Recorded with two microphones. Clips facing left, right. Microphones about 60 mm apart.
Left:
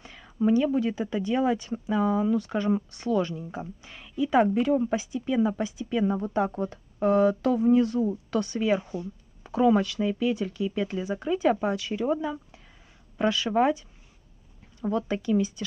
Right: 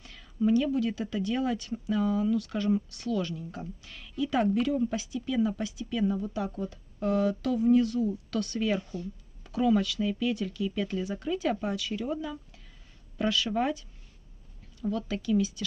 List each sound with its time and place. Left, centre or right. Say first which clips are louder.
0.0 s speech: left 2 dB; left
6.1 s speech: left 6 dB; left
7.0 s speech: left 6 dB; left